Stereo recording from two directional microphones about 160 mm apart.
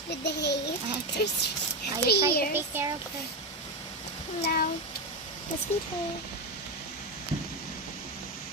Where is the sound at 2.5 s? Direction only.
15° right (ahead or behind).